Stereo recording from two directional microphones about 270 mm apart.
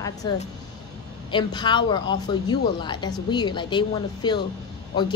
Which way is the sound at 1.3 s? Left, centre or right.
Centre.